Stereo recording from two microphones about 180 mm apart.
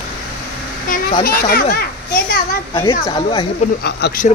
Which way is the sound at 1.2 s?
55° left (ahead or behind).